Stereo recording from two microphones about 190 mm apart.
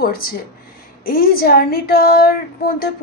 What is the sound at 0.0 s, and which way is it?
A woman's voice, 50° left (ahead or behind).